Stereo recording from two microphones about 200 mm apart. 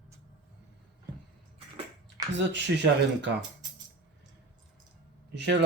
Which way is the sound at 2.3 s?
60° right (ahead or behind).